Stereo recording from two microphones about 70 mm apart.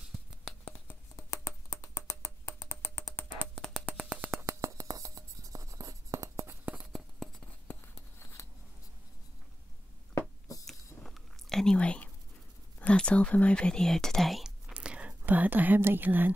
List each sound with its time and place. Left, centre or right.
0.8 s finger snapping: left
2.6 s a sound: left
3.8 s a sound: centre
4.5 s writing: right
7.2 s writing: centre
8.2 s a sound: left
10.7 s chewing: centre
12.7 s speech: centre
14.7 s speech: centre